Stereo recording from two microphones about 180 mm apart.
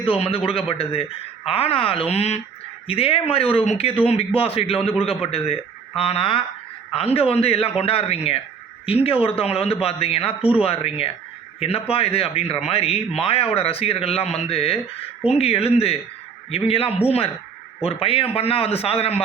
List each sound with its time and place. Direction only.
0.0 s speech: 30° left (ahead or behind)